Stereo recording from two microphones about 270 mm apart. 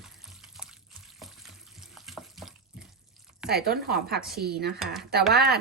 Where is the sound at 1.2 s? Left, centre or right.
Centre.